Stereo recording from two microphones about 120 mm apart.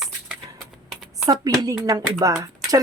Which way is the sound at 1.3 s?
30° right (ahead or behind).